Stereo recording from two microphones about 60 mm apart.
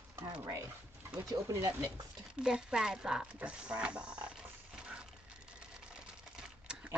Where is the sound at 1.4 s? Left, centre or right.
Right.